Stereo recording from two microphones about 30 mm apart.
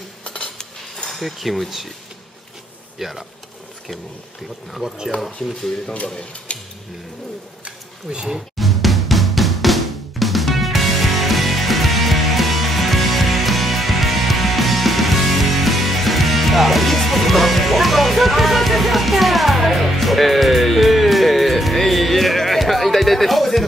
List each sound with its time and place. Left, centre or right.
0.6 s cutlery: left
1.1 s speech: centre
3.0 s speech: centre
5.1 s speech: centre
6.1 s speech: left
7.6 s a sound: right
8.5 s drum: centre